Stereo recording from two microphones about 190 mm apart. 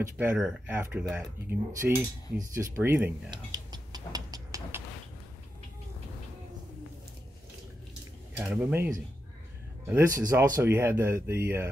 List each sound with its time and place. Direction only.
0.2 s speech: 5° right (ahead or behind)
3.3 s tick-tock: 20° right (ahead or behind)
8.4 s speech: 5° right (ahead or behind)